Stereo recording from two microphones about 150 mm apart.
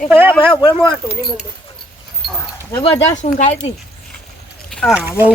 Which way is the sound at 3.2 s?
55° left (ahead or behind).